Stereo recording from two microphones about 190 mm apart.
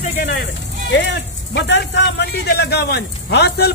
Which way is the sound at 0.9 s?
65° left (ahead or behind).